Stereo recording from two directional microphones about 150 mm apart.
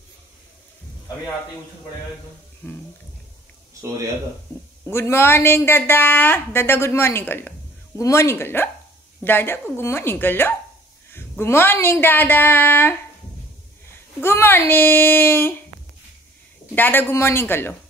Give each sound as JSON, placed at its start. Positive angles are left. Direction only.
{"t": 4.8, "sound": "speech", "side_deg": 15}
{"t": 14.2, "sound": "speech", "side_deg": 15}
{"t": 16.7, "sound": "speech", "side_deg": 15}